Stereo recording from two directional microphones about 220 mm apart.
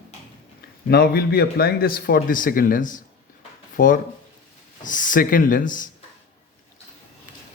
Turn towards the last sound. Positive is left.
turn(degrees=35)  # may be behind; listen again after turning